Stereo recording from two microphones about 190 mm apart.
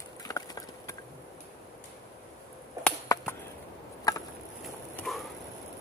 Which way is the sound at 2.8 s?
20° right (ahead or behind).